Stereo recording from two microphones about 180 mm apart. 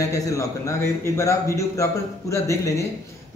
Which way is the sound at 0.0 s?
15° left (ahead or behind).